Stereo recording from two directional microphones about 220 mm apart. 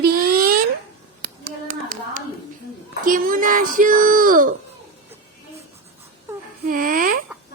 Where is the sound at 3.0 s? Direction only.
40° right (ahead or behind).